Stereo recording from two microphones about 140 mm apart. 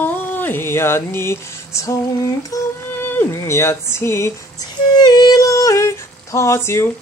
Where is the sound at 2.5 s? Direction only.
25° left (ahead or behind).